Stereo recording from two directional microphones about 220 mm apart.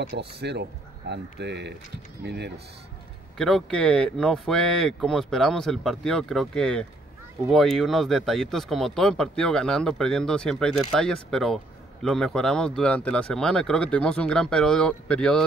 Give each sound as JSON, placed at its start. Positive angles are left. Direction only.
{"t": 0.2, "sound": "speech", "side_deg": -50}
{"t": 3.3, "sound": "speech", "side_deg": 0}